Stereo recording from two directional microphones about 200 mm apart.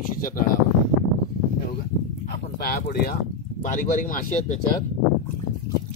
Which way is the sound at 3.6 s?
40° left (ahead or behind).